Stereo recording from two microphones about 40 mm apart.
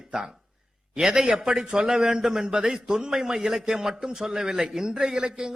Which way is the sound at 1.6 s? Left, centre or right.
Centre.